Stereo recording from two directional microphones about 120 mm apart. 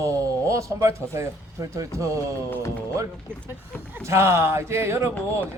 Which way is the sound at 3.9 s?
25° right (ahead or behind).